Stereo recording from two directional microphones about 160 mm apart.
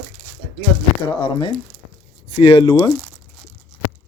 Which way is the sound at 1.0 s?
30° left (ahead or behind).